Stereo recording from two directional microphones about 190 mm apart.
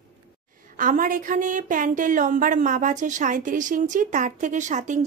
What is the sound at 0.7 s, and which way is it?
Speech, 45° right (ahead or behind).